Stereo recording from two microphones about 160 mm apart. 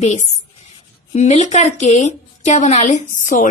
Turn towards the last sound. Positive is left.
turn(degrees=50)  # may be behind; listen again after turning